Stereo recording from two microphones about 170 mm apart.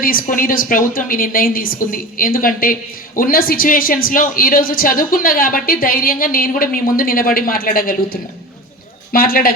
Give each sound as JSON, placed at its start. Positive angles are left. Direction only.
{"t": 0.0, "sound": "speech", "side_deg": 55}